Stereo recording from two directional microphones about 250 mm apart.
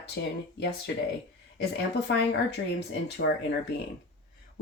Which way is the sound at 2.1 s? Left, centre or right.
Left.